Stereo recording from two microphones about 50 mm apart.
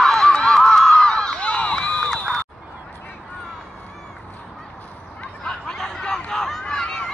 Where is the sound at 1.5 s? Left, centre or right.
Left.